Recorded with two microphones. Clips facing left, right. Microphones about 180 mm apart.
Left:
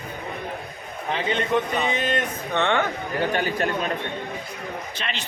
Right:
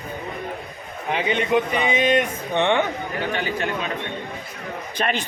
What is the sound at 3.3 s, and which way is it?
Speech, 40° left (ahead or behind).